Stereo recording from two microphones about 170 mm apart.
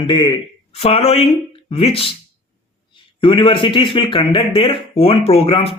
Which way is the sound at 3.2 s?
30° left (ahead or behind).